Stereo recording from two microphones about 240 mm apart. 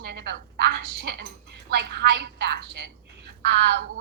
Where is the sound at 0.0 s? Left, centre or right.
Right.